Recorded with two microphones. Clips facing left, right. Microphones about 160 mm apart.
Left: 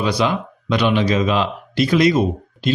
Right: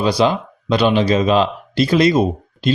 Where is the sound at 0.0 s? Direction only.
30° right (ahead or behind).